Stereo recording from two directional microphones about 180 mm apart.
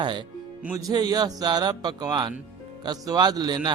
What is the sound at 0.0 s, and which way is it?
Speech, 25° right (ahead or behind).